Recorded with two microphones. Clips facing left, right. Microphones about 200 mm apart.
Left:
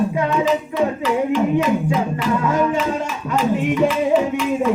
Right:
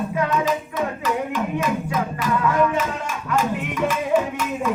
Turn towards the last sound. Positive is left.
turn(degrees=25)  # may be behind; listen again after turning